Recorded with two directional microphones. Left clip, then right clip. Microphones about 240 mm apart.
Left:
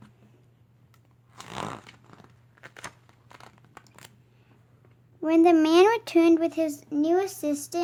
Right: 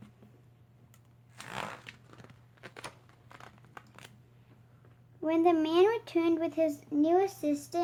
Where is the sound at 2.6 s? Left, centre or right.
Centre.